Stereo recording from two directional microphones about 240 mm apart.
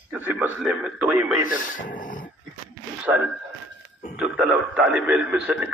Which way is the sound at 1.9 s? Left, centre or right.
Left.